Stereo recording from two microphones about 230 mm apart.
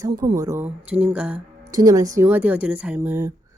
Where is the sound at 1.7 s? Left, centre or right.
Centre.